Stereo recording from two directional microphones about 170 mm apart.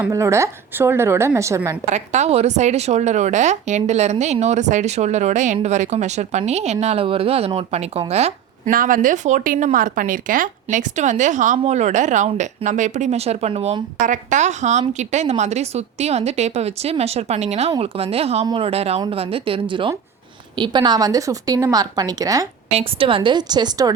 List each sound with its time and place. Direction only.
0.1 s a woman's voice: 15° right (ahead or behind)
1.9 s speech: 40° right (ahead or behind)
8.7 s a woman's voice: 55° right (ahead or behind); by 22.4 s 20° right (ahead or behind)
22.7 s a woman's voice: 35° right (ahead or behind)